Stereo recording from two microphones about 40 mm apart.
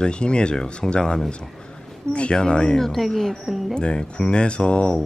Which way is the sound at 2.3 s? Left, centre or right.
Left.